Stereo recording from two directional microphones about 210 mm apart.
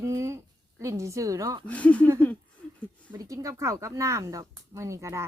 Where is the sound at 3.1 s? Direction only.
15° right (ahead or behind).